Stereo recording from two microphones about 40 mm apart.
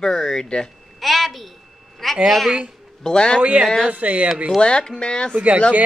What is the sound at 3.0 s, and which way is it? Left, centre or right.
Speech, left.